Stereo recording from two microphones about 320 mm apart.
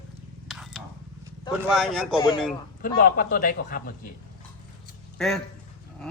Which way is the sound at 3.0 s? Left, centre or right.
Left.